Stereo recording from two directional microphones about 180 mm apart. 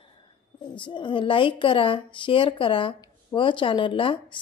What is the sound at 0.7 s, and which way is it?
A woman's voice, 25° left (ahead or behind).